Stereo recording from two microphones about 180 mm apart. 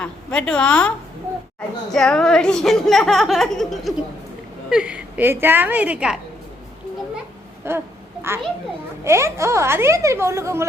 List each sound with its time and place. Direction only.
0.0 s a woman's voice: 5° left (ahead or behind)
7.6 s a woman's voice: 15° right (ahead or behind)